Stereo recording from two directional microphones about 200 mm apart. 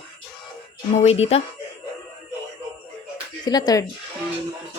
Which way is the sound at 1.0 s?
30° left (ahead or behind).